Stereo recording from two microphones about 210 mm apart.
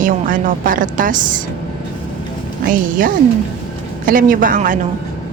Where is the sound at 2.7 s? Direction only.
40° right (ahead or behind).